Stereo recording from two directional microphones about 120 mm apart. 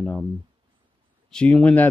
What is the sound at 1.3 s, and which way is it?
Speech, 10° left (ahead or behind).